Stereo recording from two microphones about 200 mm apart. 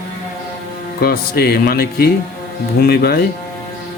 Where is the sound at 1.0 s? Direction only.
50° left (ahead or behind).